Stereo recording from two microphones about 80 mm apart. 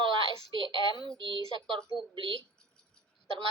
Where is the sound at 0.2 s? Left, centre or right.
Right.